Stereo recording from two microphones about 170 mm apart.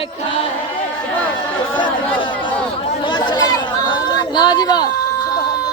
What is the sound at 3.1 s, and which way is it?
Chatter, 30° left (ahead or behind).